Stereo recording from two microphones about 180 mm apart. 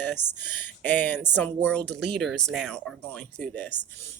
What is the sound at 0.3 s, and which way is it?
Speech, 10° left (ahead or behind).